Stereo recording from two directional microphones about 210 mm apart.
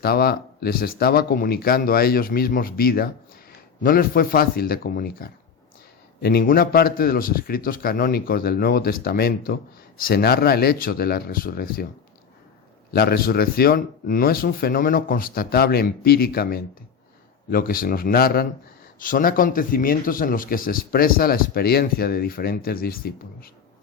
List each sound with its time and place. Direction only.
0.0 s speech: 45° left (ahead or behind)
12.9 s speech: 50° left (ahead or behind)